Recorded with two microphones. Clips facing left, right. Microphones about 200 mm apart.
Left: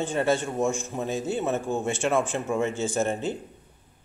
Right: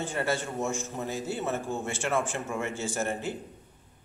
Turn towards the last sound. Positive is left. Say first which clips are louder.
# left 5 dB
turn(degrees=20)  # may be behind; listen again after turning